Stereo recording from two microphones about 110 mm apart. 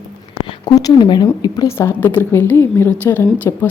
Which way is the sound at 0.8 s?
40° left (ahead or behind).